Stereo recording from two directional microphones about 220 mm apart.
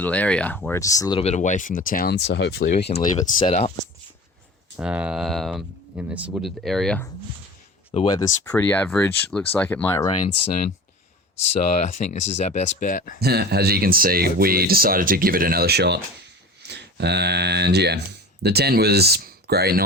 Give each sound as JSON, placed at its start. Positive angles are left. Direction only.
{"t": 0.0, "sound": "speech", "side_deg": 5}
{"t": 1.2, "sound": "speech", "side_deg": 30}
{"t": 2.9, "sound": "speech", "side_deg": 30}
{"t": 4.8, "sound": "speech", "side_deg": -5}
{"t": 7.9, "sound": "speech", "side_deg": 25}
{"t": 8.5, "sound": "speech", "side_deg": 10}
{"t": 11.8, "sound": "speech", "side_deg": 35}
{"t": 13.1, "sound": "speech", "side_deg": -45}